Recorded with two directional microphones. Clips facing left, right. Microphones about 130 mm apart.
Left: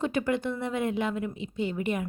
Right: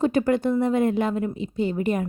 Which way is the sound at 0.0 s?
40° right (ahead or behind).